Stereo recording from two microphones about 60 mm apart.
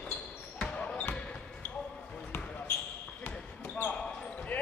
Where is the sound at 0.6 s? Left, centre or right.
Left.